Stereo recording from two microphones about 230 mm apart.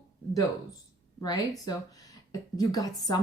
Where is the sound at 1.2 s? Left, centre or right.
Centre.